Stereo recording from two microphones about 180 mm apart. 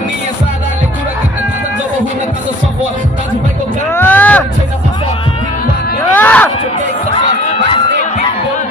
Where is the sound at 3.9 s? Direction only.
10° left (ahead or behind).